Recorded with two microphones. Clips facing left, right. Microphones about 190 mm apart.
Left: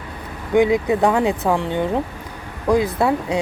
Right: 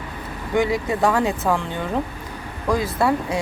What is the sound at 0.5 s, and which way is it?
A woman's voice, 15° left (ahead or behind).